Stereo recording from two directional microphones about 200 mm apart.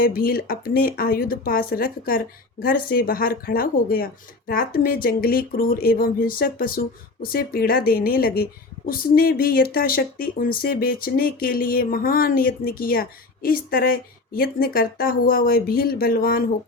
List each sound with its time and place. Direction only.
0.0 s speech: 45° left (ahead or behind)